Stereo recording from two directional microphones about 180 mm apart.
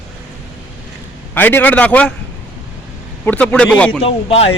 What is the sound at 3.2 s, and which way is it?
Speech, 5° left (ahead or behind).